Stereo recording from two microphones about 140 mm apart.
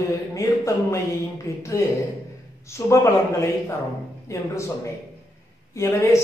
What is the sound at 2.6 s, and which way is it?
Speech, 20° left (ahead or behind).